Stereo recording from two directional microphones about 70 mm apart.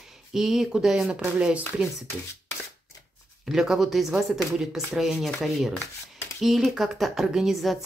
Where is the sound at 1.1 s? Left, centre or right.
Centre.